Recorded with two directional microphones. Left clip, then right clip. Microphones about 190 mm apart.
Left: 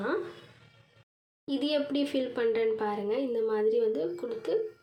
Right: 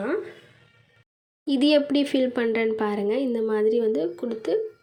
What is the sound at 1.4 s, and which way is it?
Speech, 40° right (ahead or behind).